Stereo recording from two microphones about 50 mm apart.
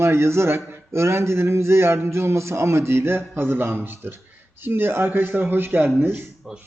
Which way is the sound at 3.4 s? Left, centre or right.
Right.